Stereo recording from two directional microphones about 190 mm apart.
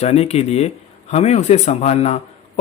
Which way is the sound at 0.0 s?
35° left (ahead or behind).